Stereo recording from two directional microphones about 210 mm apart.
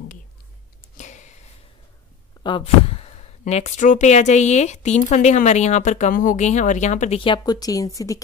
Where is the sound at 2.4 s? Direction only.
25° left (ahead or behind).